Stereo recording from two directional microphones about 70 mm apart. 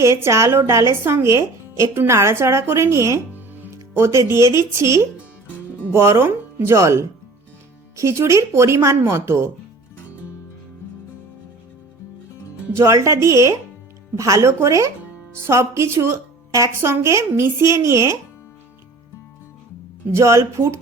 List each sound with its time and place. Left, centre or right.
0.0 s a woman's voice: right
3.3 s music: right
4.0 s a woman's voice: right
12.7 s a woman's voice: right
20.1 s speech: right